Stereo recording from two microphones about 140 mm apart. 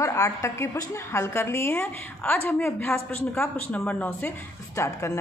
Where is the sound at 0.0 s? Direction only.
20° left (ahead or behind).